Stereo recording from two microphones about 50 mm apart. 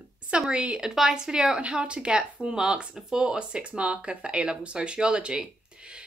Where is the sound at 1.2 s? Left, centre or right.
Centre.